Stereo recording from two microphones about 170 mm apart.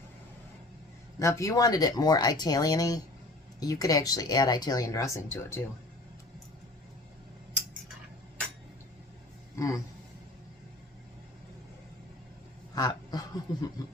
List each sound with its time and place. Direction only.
1.2 s speech: 20° left (ahead or behind)
9.6 s speech: 20° left (ahead or behind)
12.7 s a sound: 20° left (ahead or behind)